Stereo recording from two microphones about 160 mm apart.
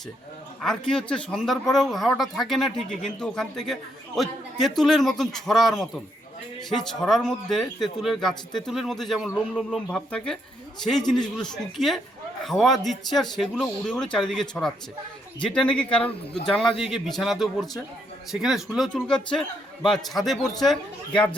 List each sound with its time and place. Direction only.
0.6 s speech: 5° left (ahead or behind)